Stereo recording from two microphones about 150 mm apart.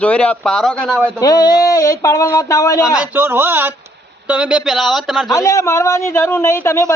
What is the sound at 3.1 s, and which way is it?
A man's voice, 15° right (ahead or behind).